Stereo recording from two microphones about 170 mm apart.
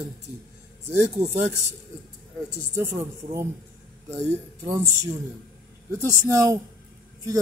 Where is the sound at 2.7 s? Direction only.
20° right (ahead or behind).